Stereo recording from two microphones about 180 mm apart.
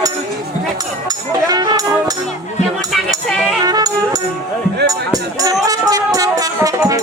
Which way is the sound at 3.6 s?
20° right (ahead or behind).